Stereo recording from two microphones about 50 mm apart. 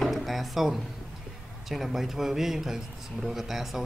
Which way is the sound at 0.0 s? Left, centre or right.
Centre.